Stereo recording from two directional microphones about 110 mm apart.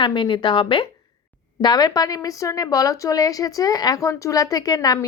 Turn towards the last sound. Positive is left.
turn(degrees=35)  # may be behind; listen again after turning